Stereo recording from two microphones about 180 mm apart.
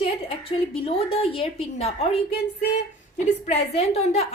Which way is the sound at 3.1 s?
35° left (ahead or behind).